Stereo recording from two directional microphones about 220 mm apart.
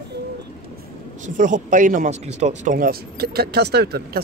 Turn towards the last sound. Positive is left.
turn(degrees=-45)  # may be behind; listen again after turning